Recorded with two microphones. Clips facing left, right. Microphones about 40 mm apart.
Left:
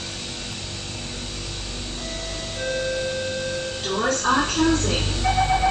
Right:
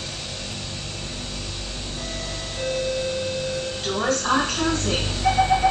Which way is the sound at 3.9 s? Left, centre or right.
Centre.